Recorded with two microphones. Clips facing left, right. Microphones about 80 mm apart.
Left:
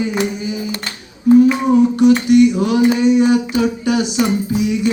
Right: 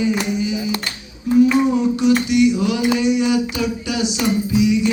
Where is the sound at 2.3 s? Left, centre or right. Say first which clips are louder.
Left 4 dB; left.